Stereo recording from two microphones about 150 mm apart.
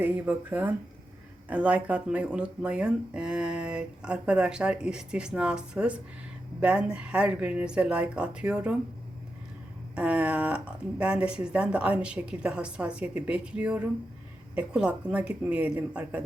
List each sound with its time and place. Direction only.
0.0 s speech: 10° right (ahead or behind)
9.9 s speech: 10° right (ahead or behind)